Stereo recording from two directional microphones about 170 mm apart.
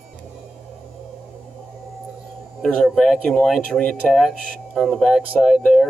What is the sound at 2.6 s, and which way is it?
Speech, 5° left (ahead or behind).